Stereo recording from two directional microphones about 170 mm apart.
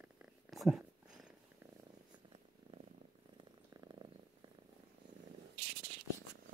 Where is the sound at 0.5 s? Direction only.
Centre (ahead or behind).